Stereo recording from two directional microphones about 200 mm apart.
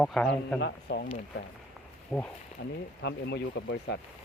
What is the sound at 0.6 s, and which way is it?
Speech, 60° left (ahead or behind).